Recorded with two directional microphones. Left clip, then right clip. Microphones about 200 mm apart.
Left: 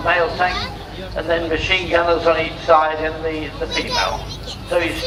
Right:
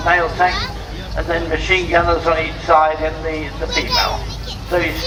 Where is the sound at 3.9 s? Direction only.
35° left (ahead or behind).